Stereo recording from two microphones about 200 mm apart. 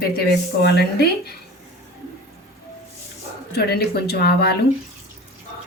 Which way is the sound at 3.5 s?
50° left (ahead or behind).